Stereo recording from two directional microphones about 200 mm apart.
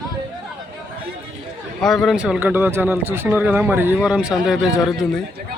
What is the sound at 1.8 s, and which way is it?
Speech, centre (ahead or behind).